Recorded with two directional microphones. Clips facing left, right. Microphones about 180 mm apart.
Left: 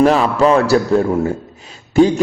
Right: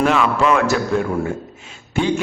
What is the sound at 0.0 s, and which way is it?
A man's voice, 35° left (ahead or behind).